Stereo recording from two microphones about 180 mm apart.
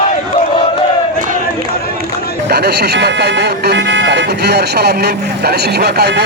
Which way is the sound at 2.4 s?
65° right (ahead or behind).